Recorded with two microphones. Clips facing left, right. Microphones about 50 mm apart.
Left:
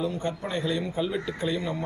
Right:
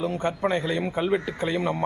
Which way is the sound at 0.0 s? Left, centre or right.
Right.